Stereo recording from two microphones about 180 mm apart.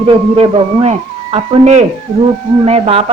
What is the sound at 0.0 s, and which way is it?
A man's voice, 30° right (ahead or behind).